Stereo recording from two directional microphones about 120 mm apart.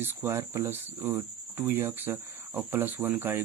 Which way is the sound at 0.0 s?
20° right (ahead or behind).